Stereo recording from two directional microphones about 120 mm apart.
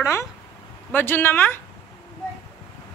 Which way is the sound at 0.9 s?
15° left (ahead or behind).